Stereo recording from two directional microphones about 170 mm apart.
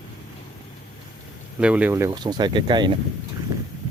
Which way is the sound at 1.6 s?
10° right (ahead or behind).